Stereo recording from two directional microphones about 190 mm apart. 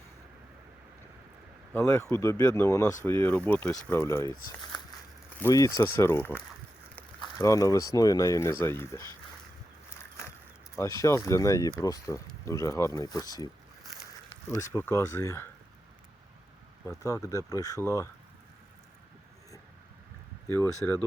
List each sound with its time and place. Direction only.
1.7 s speech: 15° left (ahead or behind)
5.4 s speech: 15° left (ahead or behind)
10.8 s speech: 15° left (ahead or behind)
14.8 s speech: 15° left (ahead or behind)
17.2 s speech: 15° left (ahead or behind)
20.5 s speech: 10° left (ahead or behind)